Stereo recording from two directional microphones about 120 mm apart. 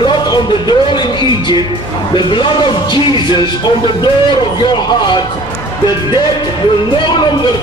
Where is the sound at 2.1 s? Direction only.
40° left (ahead or behind).